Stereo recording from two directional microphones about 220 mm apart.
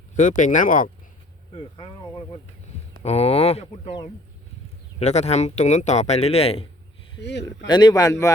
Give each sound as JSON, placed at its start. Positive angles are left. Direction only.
{"t": 0.2, "sound": "speech", "side_deg": 35}
{"t": 1.5, "sound": "speech", "side_deg": 25}
{"t": 7.2, "sound": "speech", "side_deg": 50}
{"t": 7.7, "sound": "a man's voice", "side_deg": 20}